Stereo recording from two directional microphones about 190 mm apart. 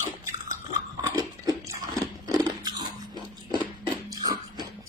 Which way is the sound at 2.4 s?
20° right (ahead or behind).